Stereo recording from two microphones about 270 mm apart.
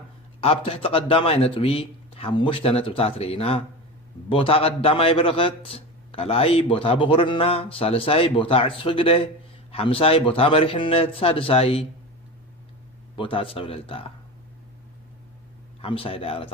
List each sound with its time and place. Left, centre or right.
0.4 s a man's voice: left
13.1 s a man's voice: centre
15.8 s a man's voice: left